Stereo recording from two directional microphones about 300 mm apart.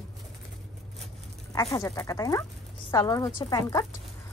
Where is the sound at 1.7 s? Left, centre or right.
Centre.